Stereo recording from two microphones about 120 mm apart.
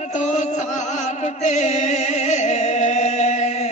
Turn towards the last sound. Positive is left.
turn(degrees=75)  # may be behind; listen again after turning